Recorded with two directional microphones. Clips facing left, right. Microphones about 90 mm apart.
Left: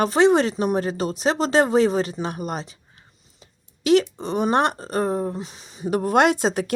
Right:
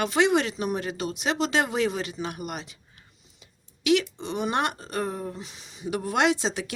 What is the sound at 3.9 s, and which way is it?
Speech, 40° left (ahead or behind).